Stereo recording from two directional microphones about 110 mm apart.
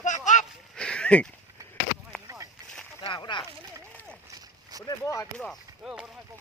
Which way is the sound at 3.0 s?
45° left (ahead or behind).